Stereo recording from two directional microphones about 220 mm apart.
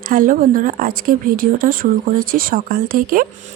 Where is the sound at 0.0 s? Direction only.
40° right (ahead or behind).